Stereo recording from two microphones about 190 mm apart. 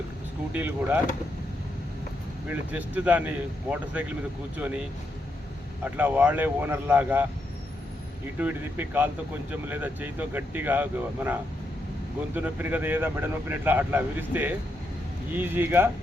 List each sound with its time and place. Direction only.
0.5 s speech: 10° right (ahead or behind)
2.5 s speech: 10° right (ahead or behind)
5.8 s speech: 10° right (ahead or behind)
8.4 s speech: 10° right (ahead or behind)